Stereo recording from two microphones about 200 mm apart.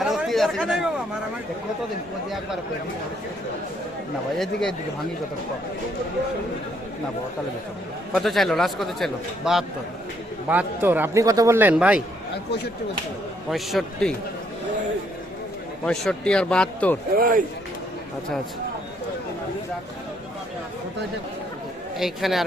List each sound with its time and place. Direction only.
0.0 s chatter: centre (ahead or behind)
8.1 s a man's voice: centre (ahead or behind)
13.5 s a man's voice: centre (ahead or behind)
15.9 s a man's voice: 5° left (ahead or behind)
17.2 s speech: 45° right (ahead or behind)
21.9 s a man's voice: centre (ahead or behind)